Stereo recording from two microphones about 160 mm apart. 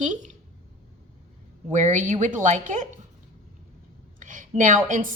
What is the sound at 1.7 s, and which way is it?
Speech, 50° right (ahead or behind).